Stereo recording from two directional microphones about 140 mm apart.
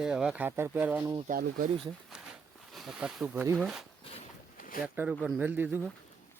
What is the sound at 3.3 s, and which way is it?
Speech, 15° right (ahead or behind).